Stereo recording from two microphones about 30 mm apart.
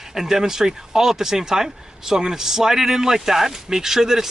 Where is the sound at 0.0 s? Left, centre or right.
Centre.